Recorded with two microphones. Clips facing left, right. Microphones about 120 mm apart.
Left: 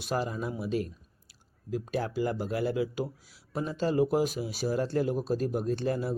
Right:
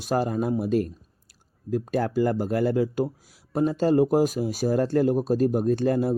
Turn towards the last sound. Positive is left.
turn(degrees=-50)  # may be behind; listen again after turning